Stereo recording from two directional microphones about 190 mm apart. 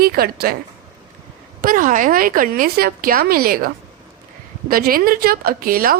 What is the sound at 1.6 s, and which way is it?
A woman's voice, 45° right (ahead or behind).